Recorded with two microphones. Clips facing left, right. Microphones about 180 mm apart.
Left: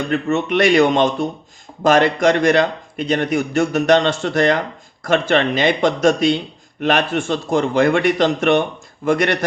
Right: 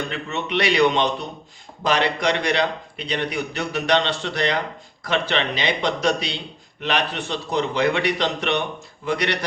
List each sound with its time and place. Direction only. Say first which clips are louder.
0.1 s a man's voice: left 8 dB; 50° left (ahead or behind)